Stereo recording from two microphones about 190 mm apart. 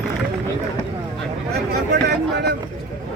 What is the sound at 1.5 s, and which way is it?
Speech, 60° right (ahead or behind).